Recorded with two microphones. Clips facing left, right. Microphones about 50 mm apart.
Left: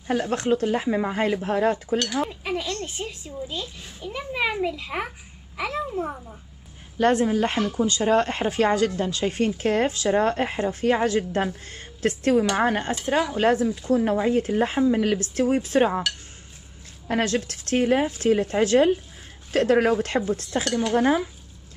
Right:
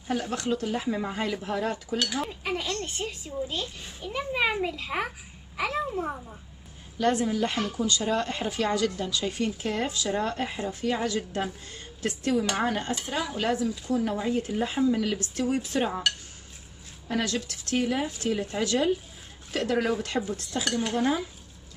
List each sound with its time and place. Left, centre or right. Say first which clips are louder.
0.1 s speech: left 6 dB; left
2.4 s a child's voice: left 2 dB; centre
7.0 s speech: left 5 dB; left
12.5 s speech: left 5 dB; left
14.8 s speech: left 2 dB; left
17.1 s speech: left 5 dB; left